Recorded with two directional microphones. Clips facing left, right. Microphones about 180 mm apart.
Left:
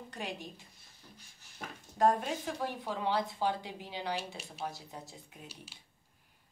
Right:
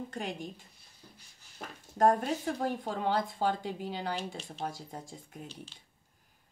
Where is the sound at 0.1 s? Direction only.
45° right (ahead or behind).